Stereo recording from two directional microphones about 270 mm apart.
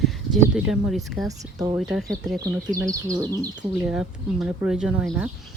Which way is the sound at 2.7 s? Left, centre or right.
Centre.